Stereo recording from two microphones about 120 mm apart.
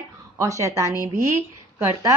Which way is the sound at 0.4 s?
25° right (ahead or behind).